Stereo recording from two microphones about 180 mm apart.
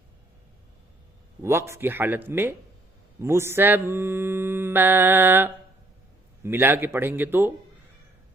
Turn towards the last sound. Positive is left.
turn(degrees=-10)  # may be behind; listen again after turning